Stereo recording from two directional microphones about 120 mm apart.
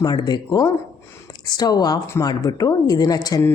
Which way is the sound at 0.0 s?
35° left (ahead or behind).